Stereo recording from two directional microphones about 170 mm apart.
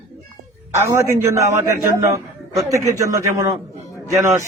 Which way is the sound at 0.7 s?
15° right (ahead or behind).